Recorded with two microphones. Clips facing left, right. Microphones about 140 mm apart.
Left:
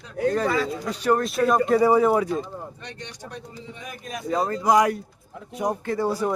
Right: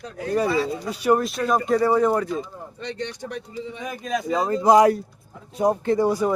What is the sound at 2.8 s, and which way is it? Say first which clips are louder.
A man's voice: right 8 dB; 70° right (ahead or behind).